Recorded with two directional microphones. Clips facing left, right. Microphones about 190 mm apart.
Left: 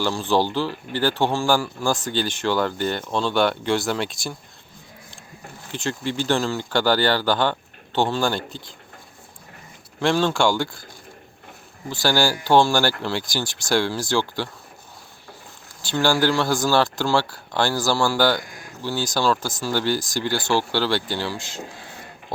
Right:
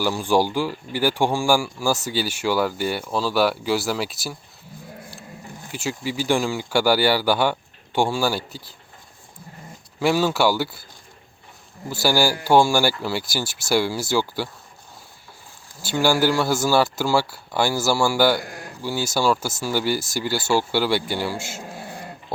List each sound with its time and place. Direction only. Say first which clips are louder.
0.0 s speech: right 1 dB; 10° right (ahead or behind)
5.7 s speech: left 1 dB; 5° right (ahead or behind)
10.0 s speech: even; 5° right (ahead or behind)
11.9 s speech: right 1 dB; 10° right (ahead or behind)
15.8 s speech: right 1 dB; 10° right (ahead or behind)